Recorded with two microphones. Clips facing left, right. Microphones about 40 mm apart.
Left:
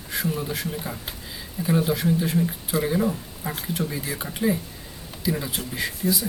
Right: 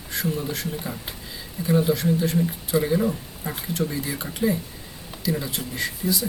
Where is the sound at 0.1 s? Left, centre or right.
Centre.